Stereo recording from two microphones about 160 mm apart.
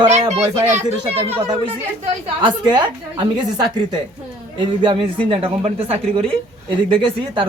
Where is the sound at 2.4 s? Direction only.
25° right (ahead or behind).